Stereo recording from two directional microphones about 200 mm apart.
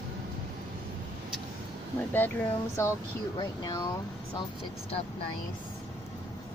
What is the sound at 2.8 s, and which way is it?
Speech, 15° left (ahead or behind).